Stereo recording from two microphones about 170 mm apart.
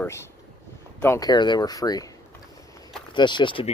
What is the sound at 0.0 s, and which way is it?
Speech, 15° left (ahead or behind).